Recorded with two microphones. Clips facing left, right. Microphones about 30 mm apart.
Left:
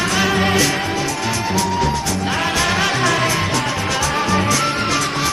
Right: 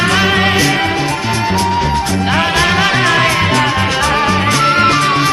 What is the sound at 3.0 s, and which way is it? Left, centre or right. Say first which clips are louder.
Music: right 5 dB; right.